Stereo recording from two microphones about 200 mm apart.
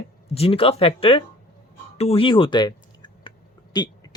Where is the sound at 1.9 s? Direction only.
30° left (ahead or behind).